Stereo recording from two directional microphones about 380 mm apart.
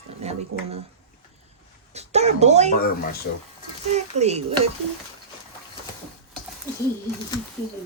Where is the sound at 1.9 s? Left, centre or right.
Centre.